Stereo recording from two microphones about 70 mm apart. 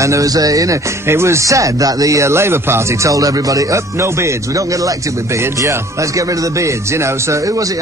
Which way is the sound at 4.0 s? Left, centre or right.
Right.